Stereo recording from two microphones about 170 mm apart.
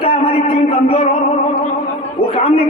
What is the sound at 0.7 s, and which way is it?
Speech, 35° left (ahead or behind).